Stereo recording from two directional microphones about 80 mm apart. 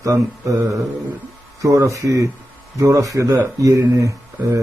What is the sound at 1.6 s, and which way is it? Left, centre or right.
A man's voice, right.